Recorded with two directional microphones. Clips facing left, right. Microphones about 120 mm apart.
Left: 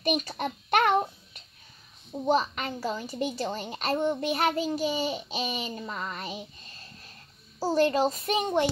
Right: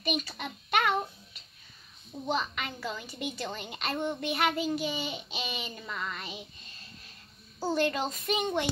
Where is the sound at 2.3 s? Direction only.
40° left (ahead or behind).